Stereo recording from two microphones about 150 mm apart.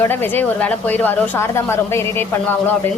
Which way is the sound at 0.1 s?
15° left (ahead or behind).